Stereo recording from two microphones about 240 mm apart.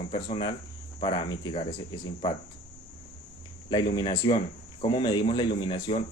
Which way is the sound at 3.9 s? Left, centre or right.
Centre.